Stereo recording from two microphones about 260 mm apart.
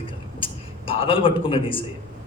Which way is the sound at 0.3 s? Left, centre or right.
Left.